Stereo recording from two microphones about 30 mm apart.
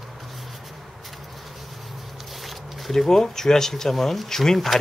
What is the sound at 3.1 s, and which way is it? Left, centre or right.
Speech, centre.